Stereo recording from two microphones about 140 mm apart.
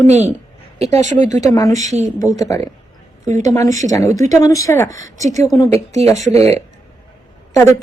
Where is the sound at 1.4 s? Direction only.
25° left (ahead or behind).